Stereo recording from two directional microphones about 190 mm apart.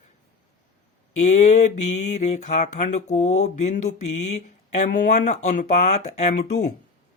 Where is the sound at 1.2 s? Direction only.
40° left (ahead or behind).